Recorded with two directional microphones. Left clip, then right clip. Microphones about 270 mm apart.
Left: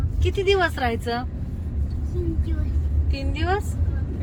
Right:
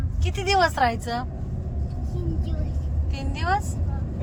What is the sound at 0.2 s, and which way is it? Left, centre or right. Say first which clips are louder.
Speech: left 1 dB; centre.